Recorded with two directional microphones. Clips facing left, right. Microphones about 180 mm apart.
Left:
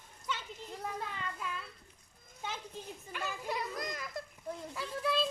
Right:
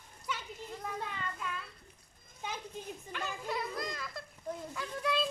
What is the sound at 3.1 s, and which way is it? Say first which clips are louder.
Speech: left 1 dB; 5° left (ahead or behind).